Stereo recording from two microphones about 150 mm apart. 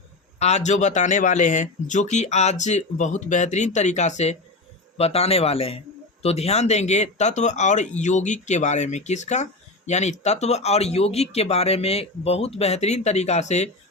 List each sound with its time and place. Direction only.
0.3 s speech: 45° left (ahead or behind)